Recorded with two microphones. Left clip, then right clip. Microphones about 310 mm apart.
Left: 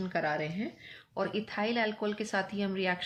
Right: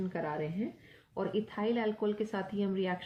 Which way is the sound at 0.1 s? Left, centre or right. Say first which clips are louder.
Left 4 dB; left.